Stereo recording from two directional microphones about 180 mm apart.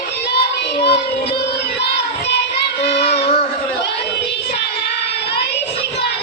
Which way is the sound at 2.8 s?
65° left (ahead or behind).